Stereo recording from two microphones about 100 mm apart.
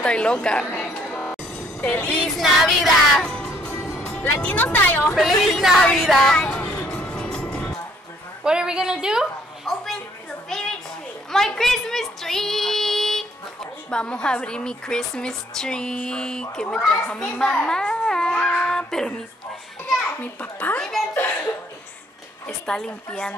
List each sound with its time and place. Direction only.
0.0 s a woman's voice: 10° left (ahead or behind)
0.7 s music: 20° left (ahead or behind)
1.8 s a woman's voice: 10° left (ahead or behind)
2.6 s music: 5° left (ahead or behind)
3.7 s speech: 25° left (ahead or behind)
5.1 s speech: centre (ahead or behind)
6.6 s music: 20° left (ahead or behind)
6.9 s music: 10° left (ahead or behind)
8.5 s a woman's voice: 10° right (ahead or behind)
10.5 s a sound: 5° left (ahead or behind)
11.3 s a woman's voice: 5° left (ahead or behind)
20.2 s a woman's voice: 15° left (ahead or behind)
21.1 s chuckle: 20° left (ahead or behind)
22.5 s a woman's voice: 5° left (ahead or behind)